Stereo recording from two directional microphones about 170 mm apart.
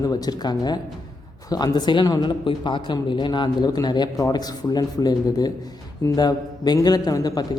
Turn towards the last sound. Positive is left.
turn(degrees=20)  # may be behind; listen again after turning